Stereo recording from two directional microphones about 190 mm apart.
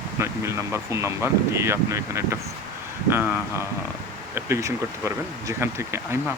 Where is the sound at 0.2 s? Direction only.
15° right (ahead or behind).